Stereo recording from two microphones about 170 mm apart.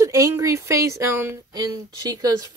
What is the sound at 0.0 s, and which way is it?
Speech, 15° right (ahead or behind).